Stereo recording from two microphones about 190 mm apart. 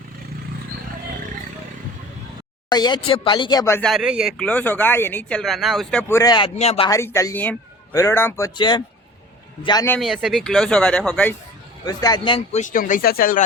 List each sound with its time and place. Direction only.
2.6 s speech: 20° left (ahead or behind)
3.8 s speech: centre (ahead or behind); by 6.9 s 30° left (ahead or behind)
6.9 s speech: 15° left (ahead or behind)
10.0 s speech: centre (ahead or behind)
11.9 s speech: 20° left (ahead or behind)
12.5 s speech: 40° left (ahead or behind)